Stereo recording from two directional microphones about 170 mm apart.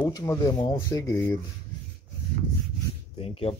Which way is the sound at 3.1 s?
35° left (ahead or behind).